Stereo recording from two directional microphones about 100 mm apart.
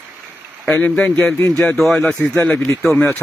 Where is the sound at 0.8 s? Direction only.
15° left (ahead or behind).